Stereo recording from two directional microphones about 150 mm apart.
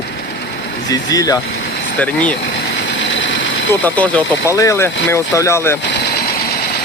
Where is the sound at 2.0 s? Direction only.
10° left (ahead or behind).